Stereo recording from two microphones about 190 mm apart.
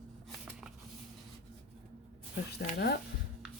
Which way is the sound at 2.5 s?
60° left (ahead or behind).